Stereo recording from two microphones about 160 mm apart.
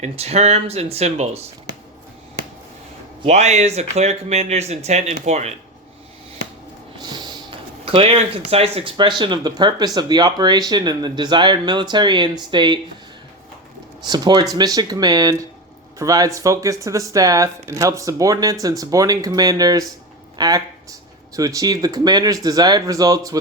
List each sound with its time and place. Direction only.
0.0 s speech: 45° right (ahead or behind)
3.2 s speech: 45° right (ahead or behind)
7.0 s a sound: 30° right (ahead or behind)
7.9 s speech: 40° right (ahead or behind)
14.1 s speech: 25° right (ahead or behind)